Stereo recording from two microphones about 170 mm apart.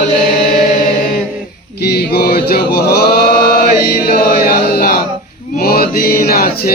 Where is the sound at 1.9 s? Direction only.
70° left (ahead or behind).